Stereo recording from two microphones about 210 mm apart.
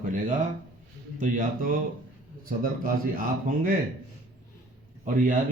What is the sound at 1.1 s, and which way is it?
A man's voice, 40° right (ahead or behind).